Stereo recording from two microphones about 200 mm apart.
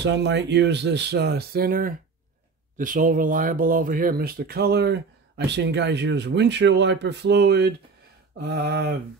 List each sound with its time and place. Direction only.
0.0 s speech: 60° right (ahead or behind)